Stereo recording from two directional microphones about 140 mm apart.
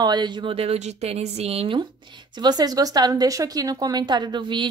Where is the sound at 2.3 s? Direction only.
30° right (ahead or behind).